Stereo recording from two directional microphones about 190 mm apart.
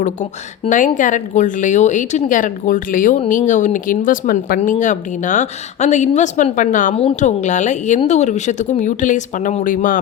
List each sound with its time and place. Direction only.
0.0 s speech: 40° left (ahead or behind)